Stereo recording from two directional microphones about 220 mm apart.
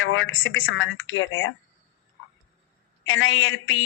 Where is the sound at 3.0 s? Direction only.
65° left (ahead or behind).